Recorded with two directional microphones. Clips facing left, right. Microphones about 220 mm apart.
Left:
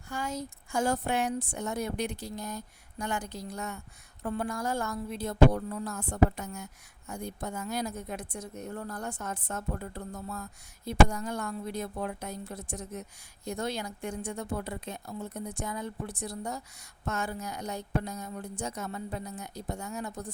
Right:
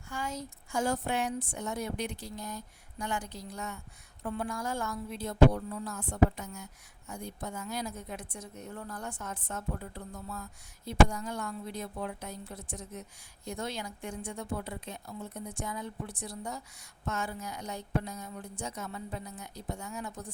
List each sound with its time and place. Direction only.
0.1 s a woman's voice: 40° left (ahead or behind)